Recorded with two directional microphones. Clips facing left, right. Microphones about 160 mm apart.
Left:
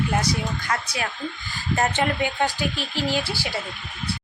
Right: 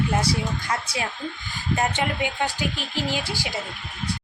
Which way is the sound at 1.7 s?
10° right (ahead or behind).